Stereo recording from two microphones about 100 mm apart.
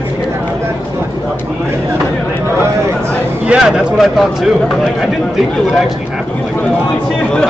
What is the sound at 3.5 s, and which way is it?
Speech, 5° right (ahead or behind).